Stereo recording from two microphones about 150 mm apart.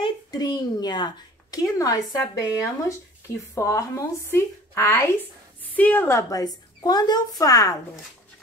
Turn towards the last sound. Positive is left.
turn(degrees=25)  # may be behind; listen again after turning